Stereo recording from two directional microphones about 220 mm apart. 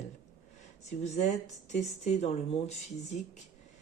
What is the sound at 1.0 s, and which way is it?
Speech, 30° left (ahead or behind).